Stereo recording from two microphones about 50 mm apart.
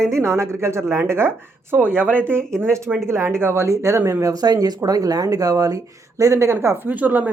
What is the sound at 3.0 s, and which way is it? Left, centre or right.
Speech, right.